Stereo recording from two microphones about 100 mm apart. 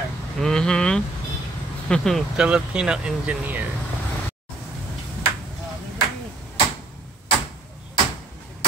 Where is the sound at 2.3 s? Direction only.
10° right (ahead or behind).